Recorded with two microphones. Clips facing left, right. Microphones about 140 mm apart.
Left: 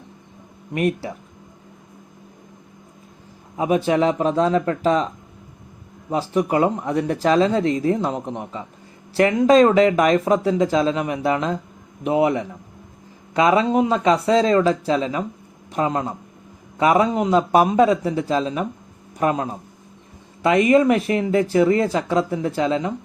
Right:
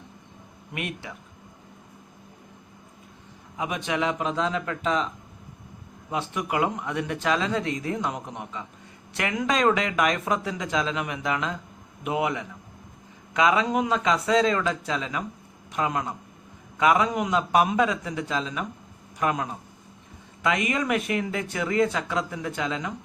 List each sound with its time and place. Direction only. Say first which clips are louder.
0.7 s speech: left 12 dB; 40° left (ahead or behind)
3.6 s speech: left 9 dB; 35° left (ahead or behind)